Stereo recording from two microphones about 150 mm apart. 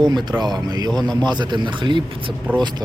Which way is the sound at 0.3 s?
30° right (ahead or behind).